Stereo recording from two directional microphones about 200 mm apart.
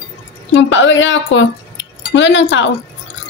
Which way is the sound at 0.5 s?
70° left (ahead or behind).